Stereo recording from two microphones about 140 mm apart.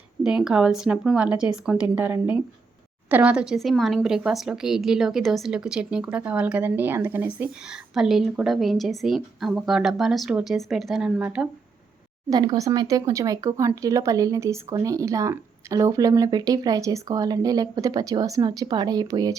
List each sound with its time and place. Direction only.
0.2 s a woman's voice: 5° right (ahead or behind)
12.3 s speech: 25° right (ahead or behind)